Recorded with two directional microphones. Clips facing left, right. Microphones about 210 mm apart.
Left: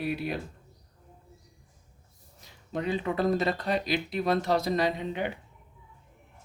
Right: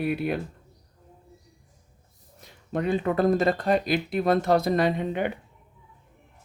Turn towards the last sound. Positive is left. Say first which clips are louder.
# right 4 dB
turn(degrees=-55)  # may be behind; listen again after turning